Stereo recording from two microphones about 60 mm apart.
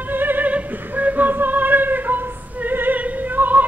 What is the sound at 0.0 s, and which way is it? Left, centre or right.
Music, right.